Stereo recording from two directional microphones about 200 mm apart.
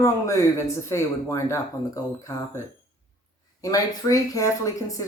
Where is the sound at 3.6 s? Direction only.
15° left (ahead or behind).